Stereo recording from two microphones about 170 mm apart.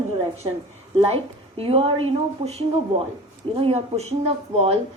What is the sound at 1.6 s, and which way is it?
Speech, 35° right (ahead or behind).